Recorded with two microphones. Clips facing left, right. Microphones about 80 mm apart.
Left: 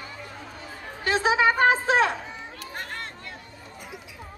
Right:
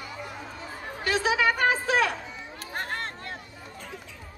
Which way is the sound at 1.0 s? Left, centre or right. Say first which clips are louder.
Left 3 dB; left.